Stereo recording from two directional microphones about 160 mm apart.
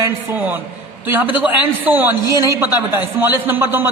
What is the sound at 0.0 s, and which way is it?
A man's voice, 10° right (ahead or behind).